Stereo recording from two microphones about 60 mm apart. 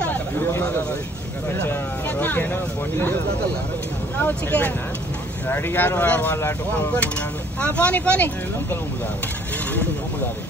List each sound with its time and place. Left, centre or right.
0.4 s speech: left
1.6 s speech: left
4.2 s speech: left
7.6 s speech: left